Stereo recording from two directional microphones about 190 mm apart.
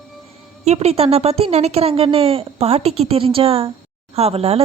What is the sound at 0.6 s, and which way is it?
A woman's voice, 35° right (ahead or behind).